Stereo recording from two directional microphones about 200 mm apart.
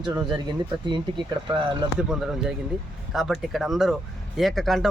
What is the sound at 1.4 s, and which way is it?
Speech, 20° right (ahead or behind).